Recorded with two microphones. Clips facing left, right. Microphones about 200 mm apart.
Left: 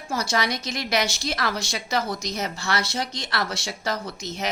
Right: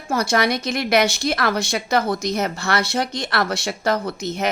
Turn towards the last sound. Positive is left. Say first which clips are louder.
# right 7 dB
turn(degrees=-55)  # may be behind; listen again after turning